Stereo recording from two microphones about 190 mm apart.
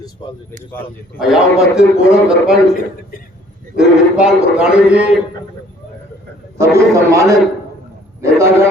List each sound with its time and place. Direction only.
0.2 s a man's voice: 20° left (ahead or behind)
1.2 s a man's voice: 5° right (ahead or behind)
3.8 s a man's voice: 5° right (ahead or behind)
6.6 s a man's voice: 15° right (ahead or behind)